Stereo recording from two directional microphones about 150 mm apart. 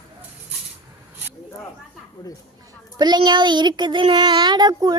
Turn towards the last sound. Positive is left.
turn(degrees=-25)  # may be behind; listen again after turning